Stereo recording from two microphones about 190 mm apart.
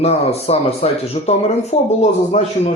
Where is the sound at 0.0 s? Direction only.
35° left (ahead or behind).